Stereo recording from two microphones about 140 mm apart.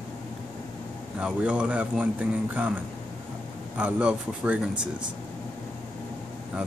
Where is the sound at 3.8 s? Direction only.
10° right (ahead or behind).